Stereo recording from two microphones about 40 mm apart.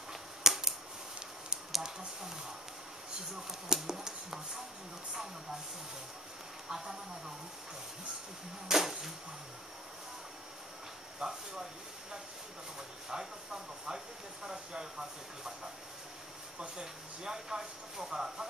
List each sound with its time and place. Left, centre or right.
0.1 s scissors: centre
1.7 s a sound: centre
3.4 s speech: centre
6.7 s speech: centre
8.6 s speech: centre
11.1 s speech: centre
13.1 s speech: centre
16.8 s speech: centre